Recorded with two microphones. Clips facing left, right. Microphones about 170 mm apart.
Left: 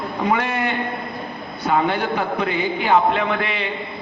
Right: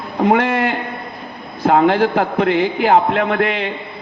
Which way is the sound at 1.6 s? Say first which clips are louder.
Right 7 dB; 90° right.